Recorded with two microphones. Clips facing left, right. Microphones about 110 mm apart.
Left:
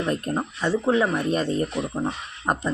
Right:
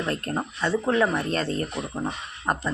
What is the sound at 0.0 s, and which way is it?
Speech, 15° left (ahead or behind).